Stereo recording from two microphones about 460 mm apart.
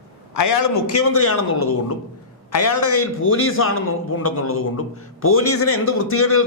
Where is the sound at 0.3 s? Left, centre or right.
Left.